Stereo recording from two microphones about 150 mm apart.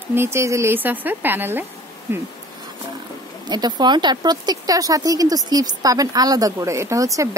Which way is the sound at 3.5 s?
30° right (ahead or behind).